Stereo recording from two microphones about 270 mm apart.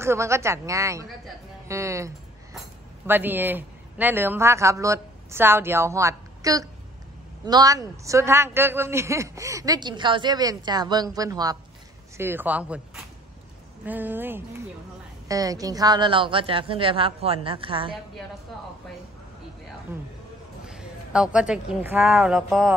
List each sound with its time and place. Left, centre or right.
0.0 s a man's voice: centre
19.9 s a man's voice: centre